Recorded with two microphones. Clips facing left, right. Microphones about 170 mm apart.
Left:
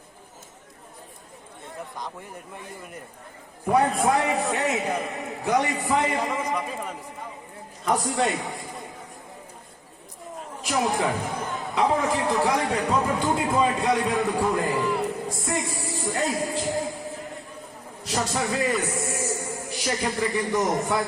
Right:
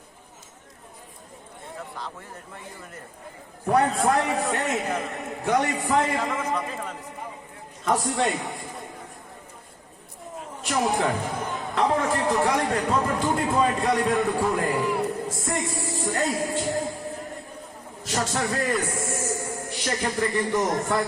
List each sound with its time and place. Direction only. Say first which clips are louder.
2.0 s speech: left 1 dB; 15° left (ahead or behind)
3.7 s a man's voice: even; 5° left (ahead or behind)
6.1 s a man's voice: even; 15° left (ahead or behind)
10.6 s a man's voice: even; centre (ahead or behind)
18.0 s a man's voice: even; centre (ahead or behind)